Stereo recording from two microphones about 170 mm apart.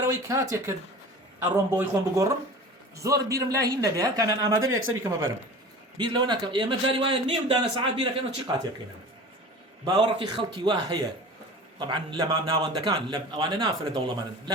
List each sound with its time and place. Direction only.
0.1 s a man's voice: 15° right (ahead or behind)
9.8 s a man's voice: 25° right (ahead or behind)